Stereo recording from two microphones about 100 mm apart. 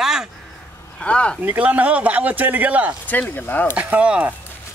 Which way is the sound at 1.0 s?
10° left (ahead or behind).